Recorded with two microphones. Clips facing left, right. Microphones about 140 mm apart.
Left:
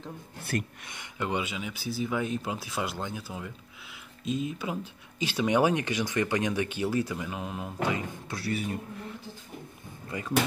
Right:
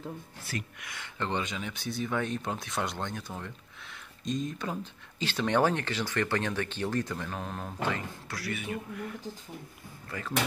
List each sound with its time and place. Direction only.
0.4 s speech: 55° left (ahead or behind)
0.7 s speech: 25° left (ahead or behind)
1.1 s speech: 10° left (ahead or behind)
8.3 s speech: 30° left (ahead or behind)
10.0 s speech: 20° left (ahead or behind)